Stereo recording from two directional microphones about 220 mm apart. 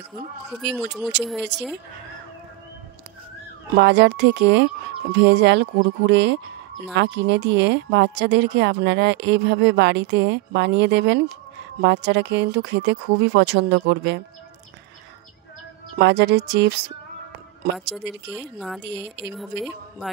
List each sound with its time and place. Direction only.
0.5 s speech: 5° right (ahead or behind)
1.5 s speech: 50° right (ahead or behind)
3.7 s speech: 50° right (ahead or behind)
16.0 s speech: 50° right (ahead or behind)
18.3 s speech: centre (ahead or behind)
18.8 s speech: 50° right (ahead or behind)
19.3 s speech: centre (ahead or behind)